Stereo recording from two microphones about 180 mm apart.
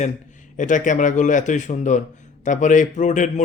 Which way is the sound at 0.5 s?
45° left (ahead or behind).